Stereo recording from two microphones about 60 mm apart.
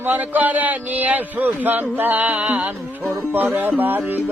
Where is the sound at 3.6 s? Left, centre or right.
Right.